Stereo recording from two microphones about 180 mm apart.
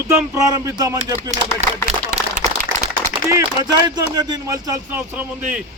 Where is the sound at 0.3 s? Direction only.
15° right (ahead or behind).